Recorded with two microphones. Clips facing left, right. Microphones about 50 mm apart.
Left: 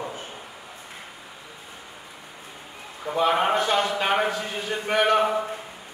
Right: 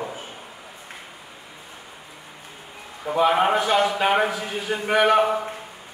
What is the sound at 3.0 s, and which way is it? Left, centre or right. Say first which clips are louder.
A man's voice: right 3 dB; centre.